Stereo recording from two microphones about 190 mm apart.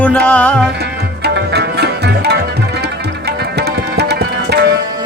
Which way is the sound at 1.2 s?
60° right (ahead or behind).